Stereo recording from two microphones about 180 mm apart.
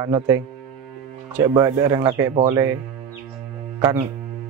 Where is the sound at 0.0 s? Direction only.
20° right (ahead or behind).